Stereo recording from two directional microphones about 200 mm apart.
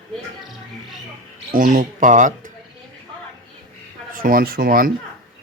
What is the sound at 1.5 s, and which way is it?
Speech, 40° right (ahead or behind).